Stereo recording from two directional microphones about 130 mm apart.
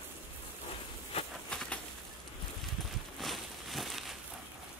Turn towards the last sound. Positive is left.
turn(degrees=0)  # may be behind; listen again after turning